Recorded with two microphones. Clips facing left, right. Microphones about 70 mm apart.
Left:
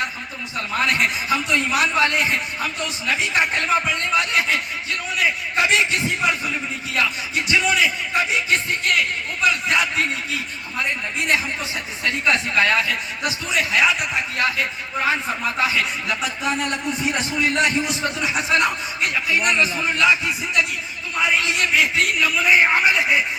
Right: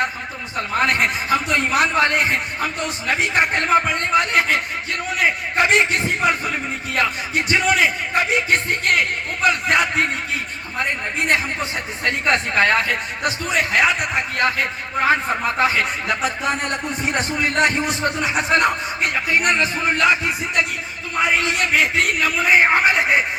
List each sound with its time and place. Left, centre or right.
0.5 s a man's voice: right